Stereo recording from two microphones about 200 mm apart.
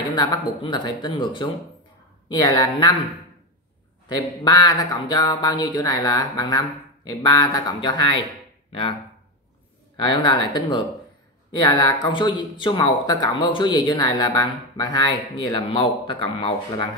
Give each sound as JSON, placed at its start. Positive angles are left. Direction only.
{"t": 0.1, "sound": "speech", "side_deg": 20}
{"t": 4.1, "sound": "speech", "side_deg": 20}
{"t": 9.9, "sound": "speech", "side_deg": 25}